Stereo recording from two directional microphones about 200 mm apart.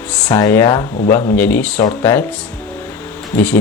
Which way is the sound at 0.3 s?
20° left (ahead or behind).